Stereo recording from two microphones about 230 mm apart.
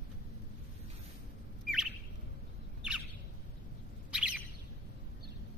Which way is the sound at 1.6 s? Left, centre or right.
Centre.